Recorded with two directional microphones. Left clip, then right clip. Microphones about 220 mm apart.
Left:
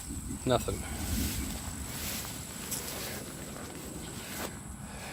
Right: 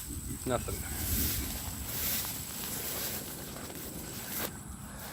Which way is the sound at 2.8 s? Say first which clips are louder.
Right 1 dB; 50° right (ahead or behind).